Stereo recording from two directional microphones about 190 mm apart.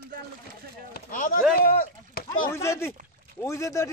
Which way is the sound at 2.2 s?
50° left (ahead or behind).